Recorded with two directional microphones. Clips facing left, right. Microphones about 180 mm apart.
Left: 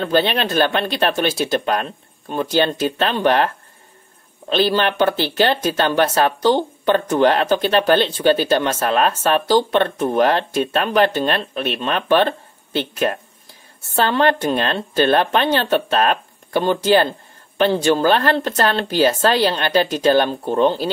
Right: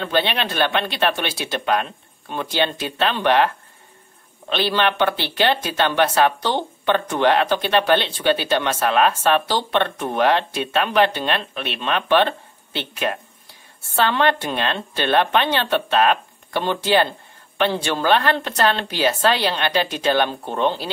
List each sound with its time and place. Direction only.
0.0 s speech: 40° left (ahead or behind)